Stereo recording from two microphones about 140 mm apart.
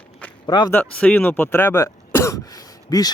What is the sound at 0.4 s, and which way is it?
Speech, 35° left (ahead or behind).